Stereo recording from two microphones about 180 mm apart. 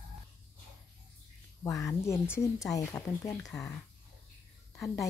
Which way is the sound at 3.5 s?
5° left (ahead or behind).